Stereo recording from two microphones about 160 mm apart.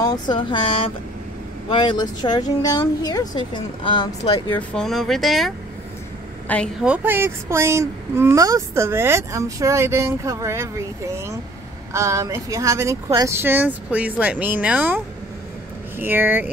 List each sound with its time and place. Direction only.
0.0 s speech: 25° left (ahead or behind)
4.5 s speech: 5° left (ahead or behind)
6.8 s a child's voice: 10° right (ahead or behind)
16.0 s a child's voice: 15° right (ahead or behind)